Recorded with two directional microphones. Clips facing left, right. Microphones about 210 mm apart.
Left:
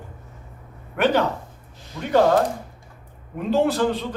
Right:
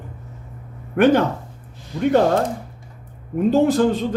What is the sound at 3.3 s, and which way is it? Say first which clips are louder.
Speech: right 5 dB; 45° right (ahead or behind).